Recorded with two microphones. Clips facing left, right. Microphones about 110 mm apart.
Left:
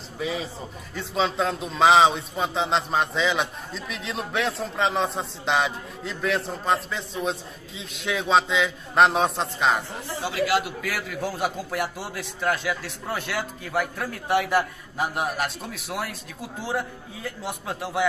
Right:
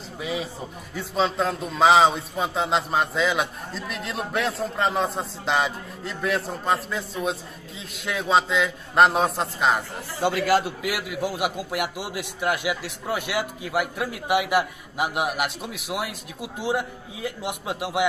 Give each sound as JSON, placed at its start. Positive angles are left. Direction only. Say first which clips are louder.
{"t": 0.2, "sound": "a man's voice", "louder": "even", "side_deg": -5}
{"t": 10.2, "sound": "a man's voice", "louder": "right 3 dB", "side_deg": -50}
{"t": 10.8, "sound": "a man's voice", "louder": "right 2 dB", "side_deg": -15}